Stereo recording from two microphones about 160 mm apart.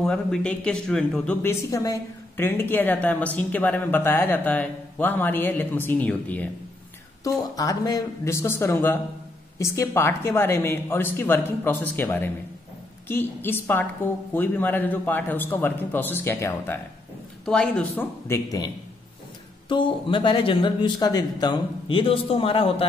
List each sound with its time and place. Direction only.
0.0 s speech: 5° left (ahead or behind)
7.2 s speech: 20° left (ahead or behind)
17.5 s speech: 5° left (ahead or behind)
18.3 s a man's voice: 20° left (ahead or behind)
19.7 s speech: 30° left (ahead or behind)